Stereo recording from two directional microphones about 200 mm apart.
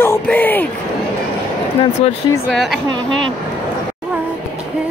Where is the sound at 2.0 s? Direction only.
30° left (ahead or behind).